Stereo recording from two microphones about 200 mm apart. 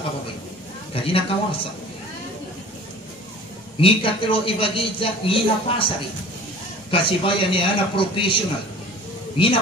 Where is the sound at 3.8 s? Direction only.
25° left (ahead or behind).